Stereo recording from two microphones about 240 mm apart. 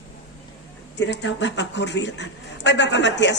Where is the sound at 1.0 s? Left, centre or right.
Left.